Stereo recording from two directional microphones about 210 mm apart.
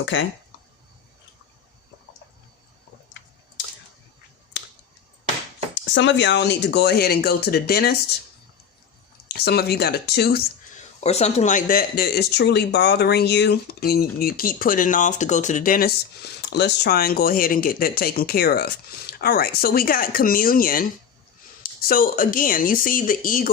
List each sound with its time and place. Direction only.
0.0 s speech: 60° left (ahead or behind)
4.5 s finger snapping: 60° left (ahead or behind)
5.9 s speech: 55° left (ahead or behind)
9.3 s speech: 50° left (ahead or behind)
10.8 s speech: 30° left (ahead or behind)
16.5 s speech: 50° left (ahead or behind)